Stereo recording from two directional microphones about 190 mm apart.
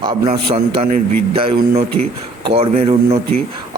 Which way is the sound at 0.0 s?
25° right (ahead or behind).